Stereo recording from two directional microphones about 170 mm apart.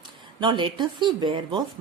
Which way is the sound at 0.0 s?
25° right (ahead or behind).